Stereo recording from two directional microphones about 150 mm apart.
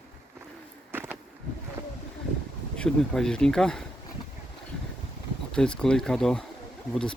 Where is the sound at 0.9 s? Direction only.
15° right (ahead or behind).